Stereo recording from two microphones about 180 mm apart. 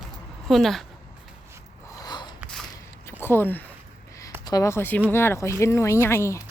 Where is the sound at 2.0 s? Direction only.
25° left (ahead or behind).